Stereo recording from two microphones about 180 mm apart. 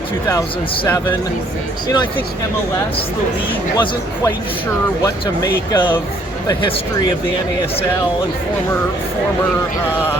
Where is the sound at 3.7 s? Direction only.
25° left (ahead or behind).